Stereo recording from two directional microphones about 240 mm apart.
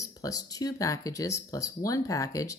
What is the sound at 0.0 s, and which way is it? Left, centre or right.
Speech, centre.